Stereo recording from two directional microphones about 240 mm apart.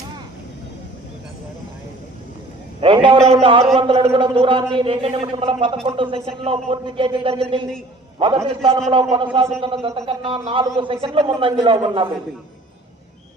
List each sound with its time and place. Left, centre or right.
2.8 s a man's voice: right